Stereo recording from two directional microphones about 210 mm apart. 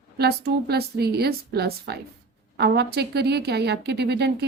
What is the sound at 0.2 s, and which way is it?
A woman's voice, 50° right (ahead or behind).